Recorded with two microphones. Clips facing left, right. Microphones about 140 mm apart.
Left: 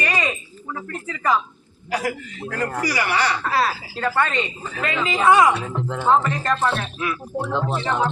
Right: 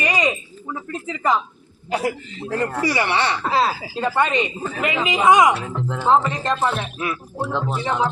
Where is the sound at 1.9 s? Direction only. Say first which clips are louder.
Right 2 dB; 25° right (ahead or behind).